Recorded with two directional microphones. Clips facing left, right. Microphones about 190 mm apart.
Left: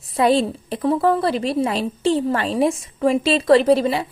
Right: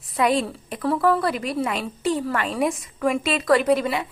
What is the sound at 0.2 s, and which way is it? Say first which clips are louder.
A woman's voice: left 4 dB; 30° left (ahead or behind).